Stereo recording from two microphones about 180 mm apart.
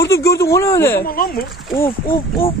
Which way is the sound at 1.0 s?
55° left (ahead or behind).